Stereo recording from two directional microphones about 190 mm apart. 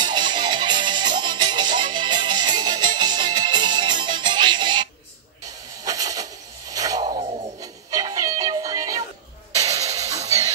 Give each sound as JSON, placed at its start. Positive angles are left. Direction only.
{"t": 0.0, "sound": "music", "side_deg": -25}
{"t": 5.9, "sound": "a sound", "side_deg": -20}
{"t": 9.6, "sound": "music", "side_deg": -15}
{"t": 9.8, "sound": "music", "side_deg": -35}